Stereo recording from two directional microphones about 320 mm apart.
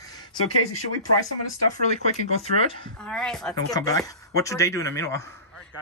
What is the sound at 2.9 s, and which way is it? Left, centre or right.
Speech, centre.